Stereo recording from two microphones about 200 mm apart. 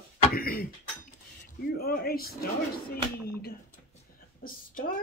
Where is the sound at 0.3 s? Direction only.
45° left (ahead or behind).